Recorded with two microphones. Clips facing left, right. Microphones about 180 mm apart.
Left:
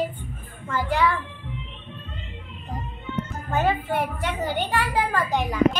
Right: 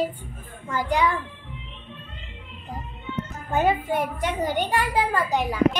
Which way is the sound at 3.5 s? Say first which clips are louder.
Right 2 dB; 15° right (ahead or behind).